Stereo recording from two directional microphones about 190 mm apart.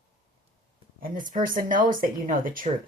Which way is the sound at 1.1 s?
45° right (ahead or behind).